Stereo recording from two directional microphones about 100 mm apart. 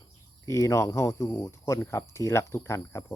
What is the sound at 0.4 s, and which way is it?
Speech, 30° left (ahead or behind).